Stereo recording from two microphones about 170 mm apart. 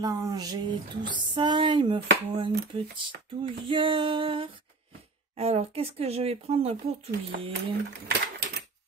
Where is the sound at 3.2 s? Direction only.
30° right (ahead or behind).